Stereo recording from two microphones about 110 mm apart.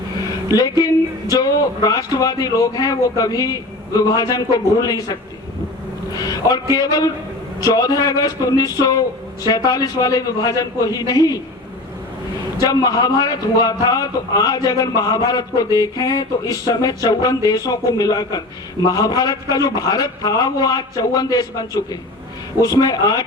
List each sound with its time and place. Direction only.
0.5 s a man's voice: 35° left (ahead or behind)
6.1 s a man's voice: 35° left (ahead or behind)
12.6 s a man's voice: 35° left (ahead or behind)